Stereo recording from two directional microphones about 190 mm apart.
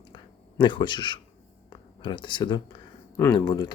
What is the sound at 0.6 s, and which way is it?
Speech, 25° left (ahead or behind).